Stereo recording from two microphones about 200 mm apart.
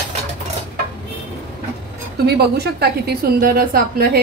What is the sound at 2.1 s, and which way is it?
A woman's voice, 50° right (ahead or behind).